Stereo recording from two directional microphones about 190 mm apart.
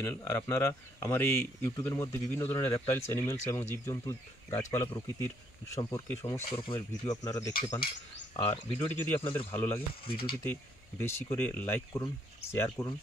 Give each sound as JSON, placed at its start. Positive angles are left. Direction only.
{"t": 0.0, "sound": "speech", "side_deg": 15}
{"t": 10.0, "sound": "speech", "side_deg": 30}
{"t": 10.5, "sound": "speech", "side_deg": 15}